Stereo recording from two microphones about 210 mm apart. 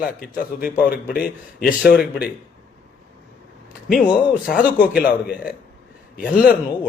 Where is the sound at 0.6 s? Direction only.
45° left (ahead or behind).